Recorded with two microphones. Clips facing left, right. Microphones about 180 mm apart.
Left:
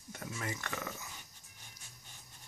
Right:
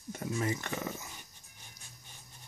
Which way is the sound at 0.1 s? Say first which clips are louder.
Right 8 dB; 25° right (ahead or behind).